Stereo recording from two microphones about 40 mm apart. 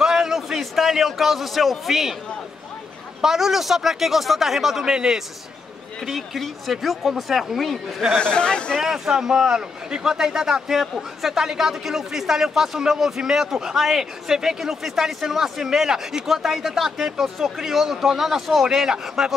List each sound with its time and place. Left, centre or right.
0.0 s a man's voice: centre
3.2 s a man's voice: centre
4.9 s a man's voice: centre
6.0 s speech: centre
8.2 s speech: left
8.7 s a man's voice: centre